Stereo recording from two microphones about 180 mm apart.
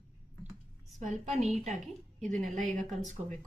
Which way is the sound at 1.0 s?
45° right (ahead or behind).